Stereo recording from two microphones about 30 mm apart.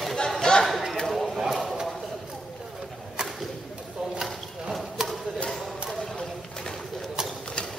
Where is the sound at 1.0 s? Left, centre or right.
Centre.